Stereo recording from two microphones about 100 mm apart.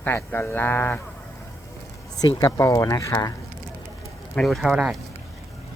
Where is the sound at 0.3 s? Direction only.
20° left (ahead or behind).